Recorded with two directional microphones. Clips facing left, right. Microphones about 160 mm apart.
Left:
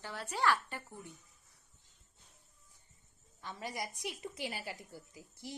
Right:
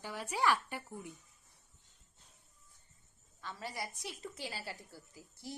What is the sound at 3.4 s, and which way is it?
A woman's voice, 15° left (ahead or behind).